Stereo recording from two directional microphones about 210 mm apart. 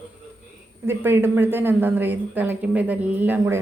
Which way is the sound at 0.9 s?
10° right (ahead or behind).